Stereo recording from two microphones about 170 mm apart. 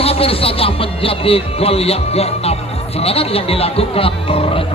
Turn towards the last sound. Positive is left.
turn(degrees=35)  # may be behind; listen again after turning